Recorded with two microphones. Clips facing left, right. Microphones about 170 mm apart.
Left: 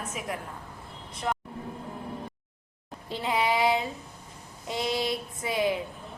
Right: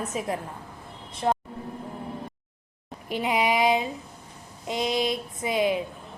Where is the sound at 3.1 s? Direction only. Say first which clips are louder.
Right 3 dB; 15° right (ahead or behind).